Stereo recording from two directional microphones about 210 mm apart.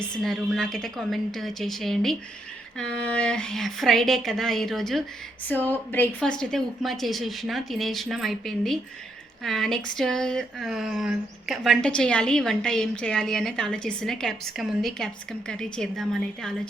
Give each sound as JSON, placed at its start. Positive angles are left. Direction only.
{"t": 0.2, "sound": "speech", "side_deg": 0}